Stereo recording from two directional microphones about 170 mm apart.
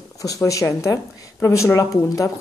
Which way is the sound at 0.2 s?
20° left (ahead or behind).